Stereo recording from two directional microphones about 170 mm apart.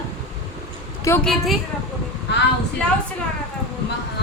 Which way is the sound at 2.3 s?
90° left.